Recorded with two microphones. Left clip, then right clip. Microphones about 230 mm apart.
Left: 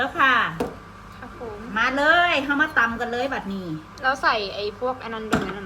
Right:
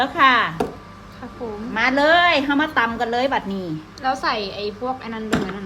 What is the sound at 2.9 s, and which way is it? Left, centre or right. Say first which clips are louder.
A woman's voice: right 5 dB; centre.